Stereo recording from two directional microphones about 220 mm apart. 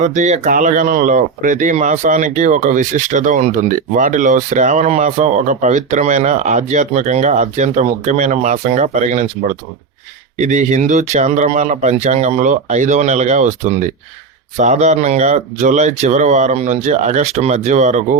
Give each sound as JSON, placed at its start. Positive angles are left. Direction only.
{"t": 0.0, "sound": "speech", "side_deg": -35}
{"t": 10.4, "sound": "speech", "side_deg": -35}